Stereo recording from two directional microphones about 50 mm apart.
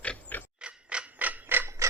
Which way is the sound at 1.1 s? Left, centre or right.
Right.